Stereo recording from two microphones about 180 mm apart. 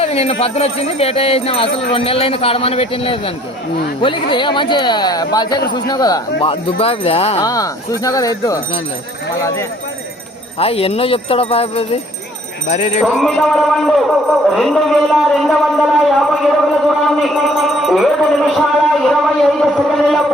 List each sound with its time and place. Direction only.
0.0 s speech: 35° left (ahead or behind)
7.4 s speech: 20° left (ahead or behind)
10.6 s speech: 30° left (ahead or behind)
13.0 s music: 10° right (ahead or behind)
13.3 s a man's voice: centre (ahead or behind)